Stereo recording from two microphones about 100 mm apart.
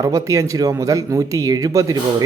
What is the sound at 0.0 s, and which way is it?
Speech, 30° right (ahead or behind).